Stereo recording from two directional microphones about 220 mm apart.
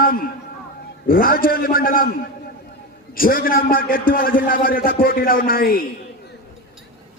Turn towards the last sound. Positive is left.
turn(degrees=40)  # may be behind; listen again after turning